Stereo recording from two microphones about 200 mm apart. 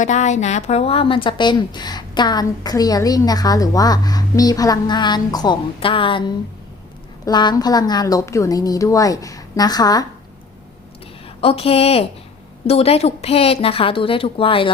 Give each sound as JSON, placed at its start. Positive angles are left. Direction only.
{"t": 0.0, "sound": "a woman's voice", "side_deg": 35}
{"t": 11.3, "sound": "a woman's voice", "side_deg": 30}